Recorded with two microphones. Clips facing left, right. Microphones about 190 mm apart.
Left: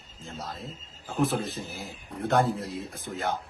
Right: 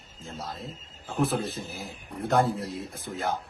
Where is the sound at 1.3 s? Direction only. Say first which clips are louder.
Right 1 dB; centre (ahead or behind).